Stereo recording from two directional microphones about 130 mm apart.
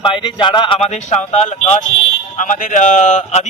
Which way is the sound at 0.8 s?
60° left (ahead or behind).